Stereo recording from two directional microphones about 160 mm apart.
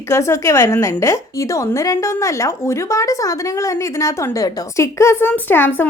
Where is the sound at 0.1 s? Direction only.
15° left (ahead or behind).